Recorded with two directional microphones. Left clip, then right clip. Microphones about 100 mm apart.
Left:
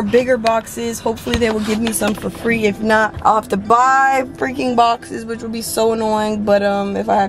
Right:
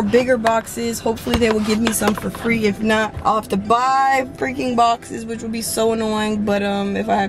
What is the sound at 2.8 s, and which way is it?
Speech, 20° right (ahead or behind).